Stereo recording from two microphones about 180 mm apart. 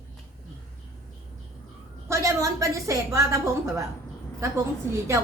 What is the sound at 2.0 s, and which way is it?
A woman's voice, 15° right (ahead or behind).